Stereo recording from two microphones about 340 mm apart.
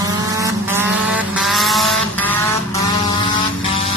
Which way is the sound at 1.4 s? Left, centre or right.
Centre.